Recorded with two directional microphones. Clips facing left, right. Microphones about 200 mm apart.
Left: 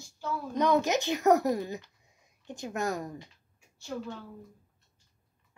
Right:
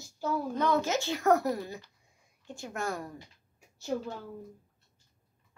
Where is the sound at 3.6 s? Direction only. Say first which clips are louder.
Right 6 dB; 40° right (ahead or behind).